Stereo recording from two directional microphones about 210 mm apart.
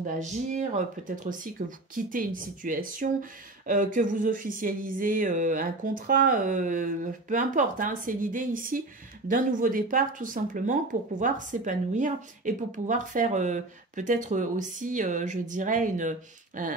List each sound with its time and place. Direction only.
0.0 s speech: 35° right (ahead or behind)